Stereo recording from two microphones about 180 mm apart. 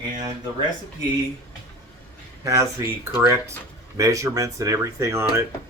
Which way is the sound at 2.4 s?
15° right (ahead or behind).